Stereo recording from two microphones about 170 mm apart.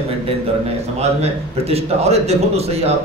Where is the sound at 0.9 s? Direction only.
35° right (ahead or behind).